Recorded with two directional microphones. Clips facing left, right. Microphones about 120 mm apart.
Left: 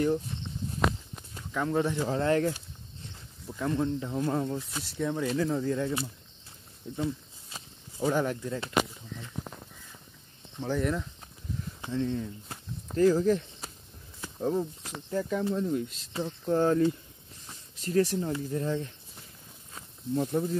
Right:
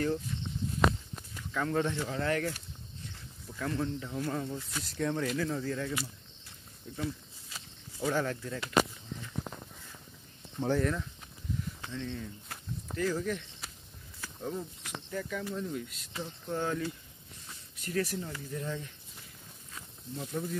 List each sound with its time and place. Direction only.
1.5 s speech: 15° left (ahead or behind)
2.0 s speech: 30° left (ahead or behind)
4.8 s speech: 10° left (ahead or behind)
5.2 s speech: 25° left (ahead or behind)
7.0 s snake: 25° left (ahead or behind)
8.1 s speech: 15° left (ahead or behind)
10.8 s speech: 20° left (ahead or behind)
12.9 s speech: 35° left (ahead or behind)
16.4 s speech: 40° left (ahead or behind)
17.5 s a sound: 30° left (ahead or behind)
18.4 s speech: 35° left (ahead or behind)
20.2 s speech: 35° left (ahead or behind)